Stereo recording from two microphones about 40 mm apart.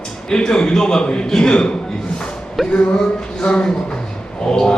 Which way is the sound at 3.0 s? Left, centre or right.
Left.